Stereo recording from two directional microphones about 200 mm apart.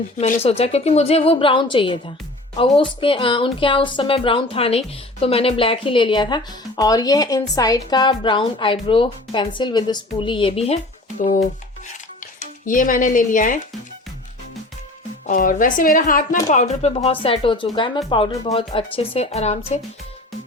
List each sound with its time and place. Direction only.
0.2 s speech: 30° left (ahead or behind)
12.4 s speech: 40° left (ahead or behind)
15.3 s a woman's voice: 40° left (ahead or behind)